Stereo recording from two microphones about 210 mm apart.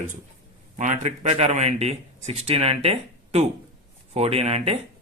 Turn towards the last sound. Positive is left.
turn(degrees=-30)  # may be behind; listen again after turning